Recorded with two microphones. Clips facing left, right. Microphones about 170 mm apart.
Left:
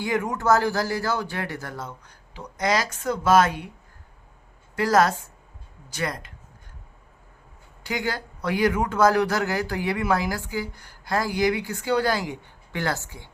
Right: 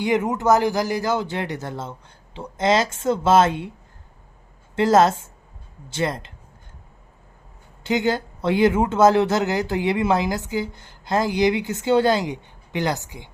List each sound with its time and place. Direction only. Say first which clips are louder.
0.0 s speech: right 4 dB; 20° right (ahead or behind)
4.7 s speech: right 4 dB; 25° right (ahead or behind)
7.9 s speech: right 7 dB; 25° right (ahead or behind)